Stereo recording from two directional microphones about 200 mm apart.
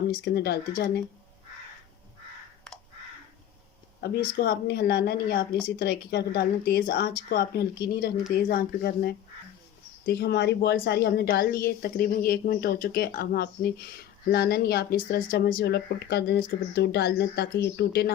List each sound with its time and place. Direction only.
0.1 s a woman's voice: 55° left (ahead or behind)
4.0 s a woman's voice: 50° left (ahead or behind)